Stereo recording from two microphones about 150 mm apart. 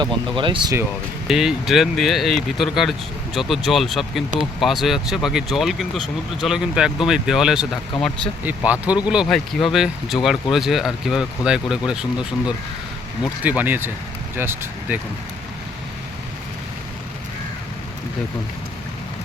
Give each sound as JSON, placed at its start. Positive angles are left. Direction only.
{"t": 0.0, "sound": "speech", "side_deg": -35}
{"t": 1.3, "sound": "speech", "side_deg": 0}